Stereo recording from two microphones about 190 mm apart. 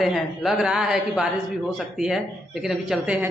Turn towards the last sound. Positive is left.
turn(degrees=0)  # may be behind; listen again after turning